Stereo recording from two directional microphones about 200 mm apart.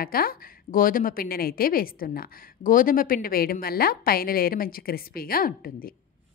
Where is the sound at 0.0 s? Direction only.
50° left (ahead or behind).